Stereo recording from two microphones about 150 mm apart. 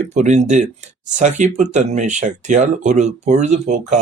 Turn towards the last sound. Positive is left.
turn(degrees=-55)  # may be behind; listen again after turning